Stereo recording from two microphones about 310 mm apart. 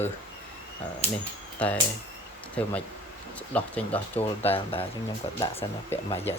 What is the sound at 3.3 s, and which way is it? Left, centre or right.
Speech, centre.